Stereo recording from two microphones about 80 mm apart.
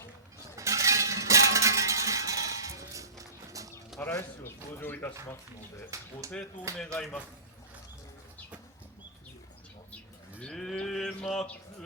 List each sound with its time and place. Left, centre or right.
0.5 s music: right
4.1 s speech: left
5.9 s speech: right
6.7 s speech: centre
10.4 s sheep: centre